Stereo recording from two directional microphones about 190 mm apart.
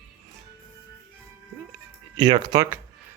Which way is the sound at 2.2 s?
20° right (ahead or behind).